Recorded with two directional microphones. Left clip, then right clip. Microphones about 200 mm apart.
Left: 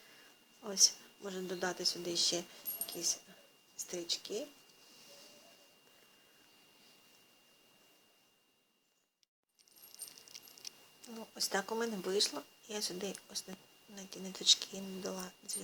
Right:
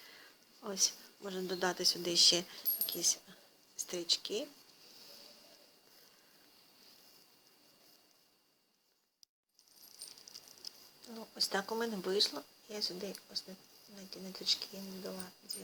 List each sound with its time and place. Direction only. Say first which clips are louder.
0.6 s speech: left 4 dB; 5° right (ahead or behind)
11.1 s speech: right 1 dB; centre (ahead or behind)
12.6 s speech: even; 15° left (ahead or behind)